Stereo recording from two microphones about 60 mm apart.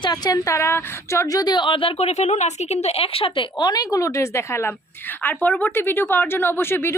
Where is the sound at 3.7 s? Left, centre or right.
Left.